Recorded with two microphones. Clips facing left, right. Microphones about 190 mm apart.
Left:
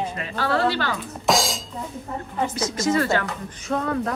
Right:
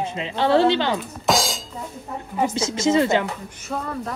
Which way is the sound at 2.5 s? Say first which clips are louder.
Right 3 dB; 25° right (ahead or behind).